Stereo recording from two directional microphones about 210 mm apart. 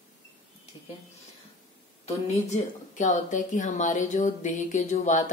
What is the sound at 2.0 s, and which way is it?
A woman's voice, 35° left (ahead or behind).